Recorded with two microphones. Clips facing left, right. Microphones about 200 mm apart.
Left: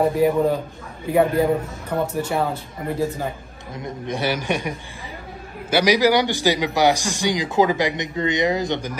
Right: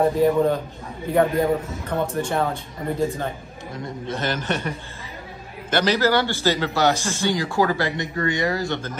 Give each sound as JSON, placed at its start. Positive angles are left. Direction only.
{"t": 0.0, "sound": "a man's voice", "side_deg": 5}
{"t": 3.7, "sound": "a man's voice", "side_deg": 15}